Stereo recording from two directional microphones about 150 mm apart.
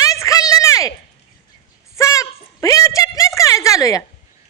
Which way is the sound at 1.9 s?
20° left (ahead or behind).